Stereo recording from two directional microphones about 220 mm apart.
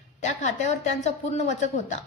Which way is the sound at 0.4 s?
30° left (ahead or behind).